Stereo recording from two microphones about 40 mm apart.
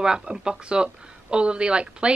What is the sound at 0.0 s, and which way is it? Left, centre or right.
A woman's voice, centre.